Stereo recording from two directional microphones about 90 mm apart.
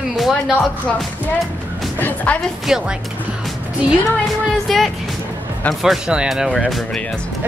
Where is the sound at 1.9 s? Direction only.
20° left (ahead or behind).